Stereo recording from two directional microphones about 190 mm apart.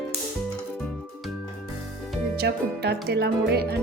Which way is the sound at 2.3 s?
60° right (ahead or behind).